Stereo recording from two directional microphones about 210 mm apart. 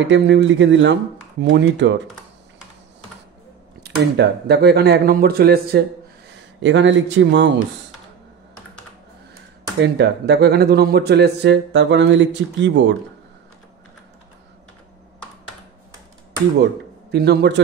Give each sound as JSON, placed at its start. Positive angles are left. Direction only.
{"t": 0.1, "sound": "speech", "side_deg": -60}
{"t": 3.8, "sound": "speech", "side_deg": -55}
{"t": 6.6, "sound": "speech", "side_deg": -60}
{"t": 9.9, "sound": "speech", "side_deg": -55}
{"t": 17.1, "sound": "speech", "side_deg": -50}